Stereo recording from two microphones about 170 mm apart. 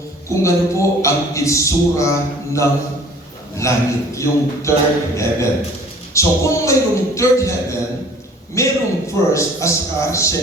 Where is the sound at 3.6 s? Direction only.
15° left (ahead or behind).